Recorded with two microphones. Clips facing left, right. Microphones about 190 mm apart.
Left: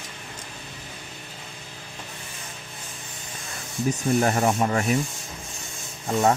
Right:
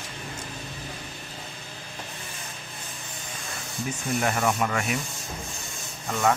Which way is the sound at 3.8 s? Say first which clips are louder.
Left 6 dB; 35° left (ahead or behind).